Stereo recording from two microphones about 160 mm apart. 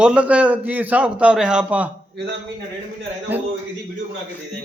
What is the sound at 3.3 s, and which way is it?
Speech, 10° right (ahead or behind).